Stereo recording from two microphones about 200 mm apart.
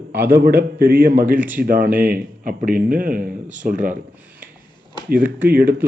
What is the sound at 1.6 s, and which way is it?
Speech, 45° right (ahead or behind).